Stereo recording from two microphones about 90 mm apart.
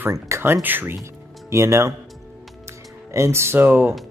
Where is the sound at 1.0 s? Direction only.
30° right (ahead or behind).